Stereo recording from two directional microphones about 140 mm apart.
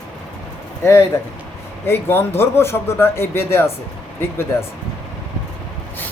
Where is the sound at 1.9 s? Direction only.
15° left (ahead or behind).